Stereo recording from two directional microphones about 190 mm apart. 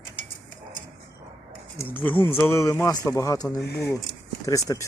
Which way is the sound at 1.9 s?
10° left (ahead or behind).